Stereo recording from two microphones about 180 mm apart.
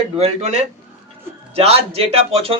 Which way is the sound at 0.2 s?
40° right (ahead or behind).